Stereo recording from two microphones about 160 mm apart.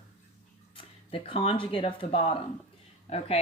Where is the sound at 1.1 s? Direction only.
35° left (ahead or behind).